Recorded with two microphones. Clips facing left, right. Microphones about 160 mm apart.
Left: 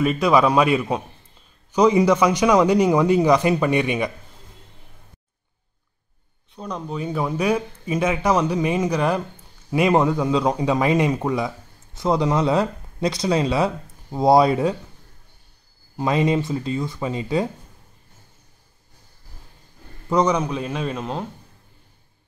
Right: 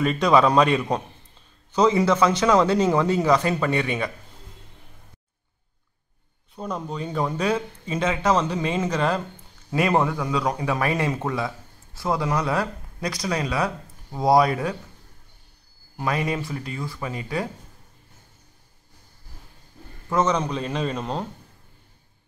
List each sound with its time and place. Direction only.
0.0 s a man's voice: 5° left (ahead or behind)
6.5 s a man's voice: 5° right (ahead or behind)
7.0 s a man's voice: 10° left (ahead or behind); by 14.8 s 25° left (ahead or behind)
16.0 s speech: 25° left (ahead or behind)
20.1 s a man's voice: 15° left (ahead or behind)